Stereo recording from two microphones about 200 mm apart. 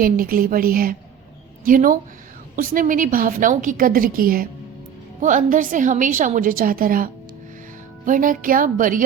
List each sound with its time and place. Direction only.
0.0 s a woman's voice: 45° right (ahead or behind)